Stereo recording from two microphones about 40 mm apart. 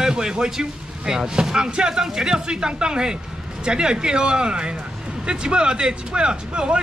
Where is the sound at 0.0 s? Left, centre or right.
Centre.